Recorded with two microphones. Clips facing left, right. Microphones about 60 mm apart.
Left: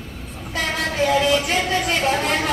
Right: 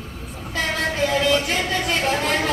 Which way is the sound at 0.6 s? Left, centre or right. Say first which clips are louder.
Even; centre.